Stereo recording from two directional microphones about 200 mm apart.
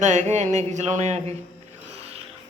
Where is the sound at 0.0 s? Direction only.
35° right (ahead or behind).